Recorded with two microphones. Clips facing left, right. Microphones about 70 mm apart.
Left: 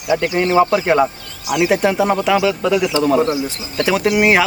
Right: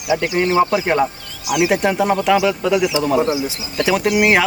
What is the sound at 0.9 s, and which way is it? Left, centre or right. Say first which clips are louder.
Speech: left 3 dB; centre.